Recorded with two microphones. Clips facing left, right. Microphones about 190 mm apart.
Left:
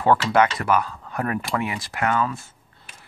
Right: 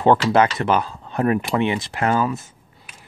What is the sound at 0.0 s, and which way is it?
Speech, 25° right (ahead or behind).